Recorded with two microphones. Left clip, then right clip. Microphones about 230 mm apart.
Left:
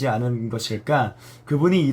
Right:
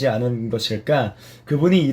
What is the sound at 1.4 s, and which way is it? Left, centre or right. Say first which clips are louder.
Speech: right 2 dB; centre.